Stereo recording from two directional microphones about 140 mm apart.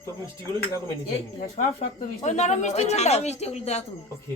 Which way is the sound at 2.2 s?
55° left (ahead or behind).